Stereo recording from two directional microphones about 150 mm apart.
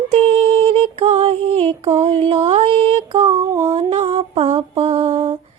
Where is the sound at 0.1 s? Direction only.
40° right (ahead or behind).